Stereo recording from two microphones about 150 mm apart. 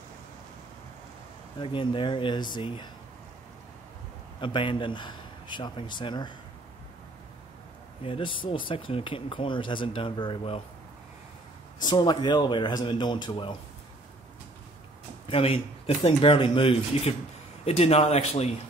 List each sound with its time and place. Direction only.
1.6 s speech: 35° left (ahead or behind)
4.4 s speech: 35° left (ahead or behind)
8.0 s speech: 35° left (ahead or behind)
11.8 s speech: 30° left (ahead or behind)
15.2 s a man's voice: 40° left (ahead or behind)